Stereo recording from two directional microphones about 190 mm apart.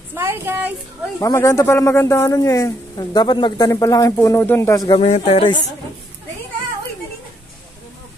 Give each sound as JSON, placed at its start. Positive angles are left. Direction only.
{"t": 0.1, "sound": "speech", "side_deg": -10}
{"t": 1.2, "sound": "a man's voice", "side_deg": 15}